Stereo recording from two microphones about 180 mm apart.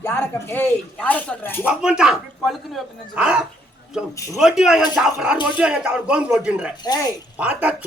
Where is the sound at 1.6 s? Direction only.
5° right (ahead or behind).